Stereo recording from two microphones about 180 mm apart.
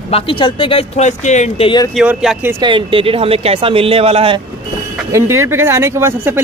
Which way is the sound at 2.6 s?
30° right (ahead or behind).